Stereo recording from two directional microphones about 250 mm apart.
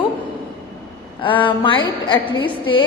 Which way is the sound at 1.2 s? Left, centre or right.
Centre.